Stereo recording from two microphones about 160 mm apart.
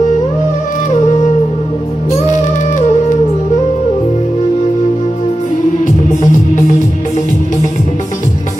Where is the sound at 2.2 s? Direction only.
50° left (ahead or behind).